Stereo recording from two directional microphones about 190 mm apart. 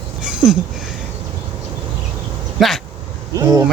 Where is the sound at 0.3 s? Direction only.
5° right (ahead or behind).